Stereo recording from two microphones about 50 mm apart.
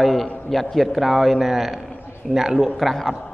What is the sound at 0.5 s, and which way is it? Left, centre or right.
A man's voice, centre.